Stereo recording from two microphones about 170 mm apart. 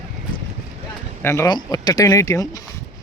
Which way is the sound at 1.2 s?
15° left (ahead or behind).